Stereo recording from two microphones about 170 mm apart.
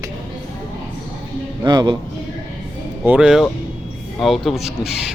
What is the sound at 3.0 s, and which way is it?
Speech, 5° right (ahead or behind).